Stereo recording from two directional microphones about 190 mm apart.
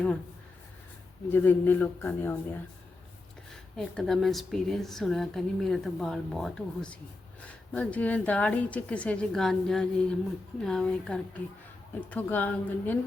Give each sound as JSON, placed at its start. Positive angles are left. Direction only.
{"t": 1.3, "sound": "a woman's voice", "side_deg": 10}